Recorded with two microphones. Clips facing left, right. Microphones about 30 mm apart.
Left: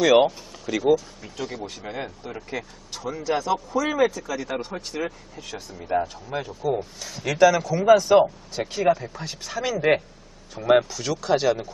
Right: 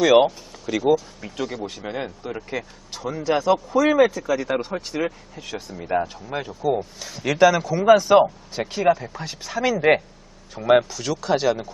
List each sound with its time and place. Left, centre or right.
0.0 s speech: centre